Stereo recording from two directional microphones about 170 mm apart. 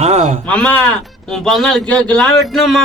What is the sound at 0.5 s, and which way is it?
A man's voice, 5° left (ahead or behind).